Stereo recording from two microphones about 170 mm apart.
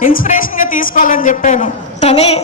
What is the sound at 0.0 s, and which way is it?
A woman's voice, 55° left (ahead or behind).